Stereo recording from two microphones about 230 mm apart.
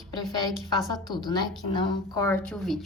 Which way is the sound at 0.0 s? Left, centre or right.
Centre.